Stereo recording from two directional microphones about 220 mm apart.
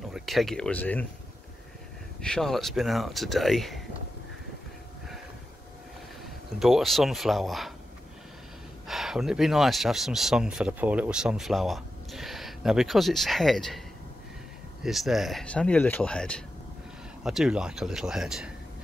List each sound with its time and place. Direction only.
0.1 s speech: centre (ahead or behind)
2.2 s speech: centre (ahead or behind)
6.6 s speech: centre (ahead or behind)
8.8 s speech: centre (ahead or behind)